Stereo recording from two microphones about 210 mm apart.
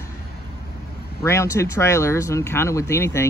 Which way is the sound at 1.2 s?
15° left (ahead or behind).